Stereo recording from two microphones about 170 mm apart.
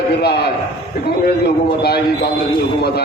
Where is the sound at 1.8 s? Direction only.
70° left (ahead or behind).